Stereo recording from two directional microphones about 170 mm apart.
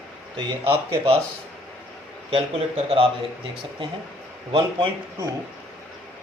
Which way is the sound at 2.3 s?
35° right (ahead or behind).